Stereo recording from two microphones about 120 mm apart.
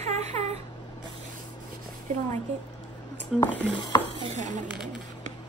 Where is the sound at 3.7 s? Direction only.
40° left (ahead or behind).